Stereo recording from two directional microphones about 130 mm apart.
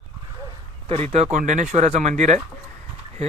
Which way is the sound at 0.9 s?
55° right (ahead or behind).